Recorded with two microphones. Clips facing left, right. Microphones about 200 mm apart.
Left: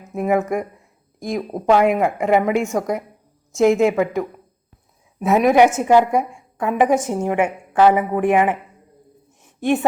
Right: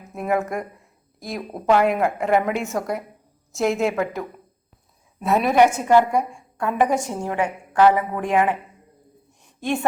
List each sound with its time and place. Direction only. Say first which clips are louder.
0.1 s a woman's voice: left 4 dB; centre (ahead or behind)
1.4 s a woman's voice: left 3 dB; 15° left (ahead or behind)
5.2 s a woman's voice: left 3 dB; 15° left (ahead or behind)
7.8 s a woman's voice: left 2 dB; 10° left (ahead or behind)